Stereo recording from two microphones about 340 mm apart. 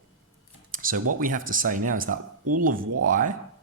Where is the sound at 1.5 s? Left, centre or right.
Right.